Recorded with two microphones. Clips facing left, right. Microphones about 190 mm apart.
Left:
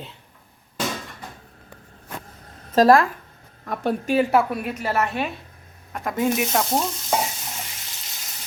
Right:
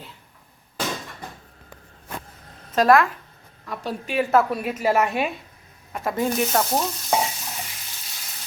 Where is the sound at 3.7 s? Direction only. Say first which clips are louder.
Left 7 dB; 50° left (ahead or behind).